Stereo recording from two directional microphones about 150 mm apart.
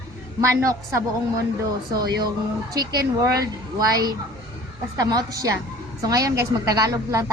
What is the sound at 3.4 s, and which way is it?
A woman's voice, 25° right (ahead or behind).